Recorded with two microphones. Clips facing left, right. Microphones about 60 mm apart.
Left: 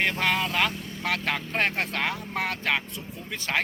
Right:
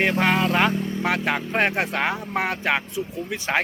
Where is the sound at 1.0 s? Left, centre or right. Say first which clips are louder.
Right 2 dB; centre.